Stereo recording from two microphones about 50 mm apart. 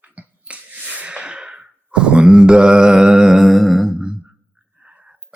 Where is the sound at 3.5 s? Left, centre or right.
Centre.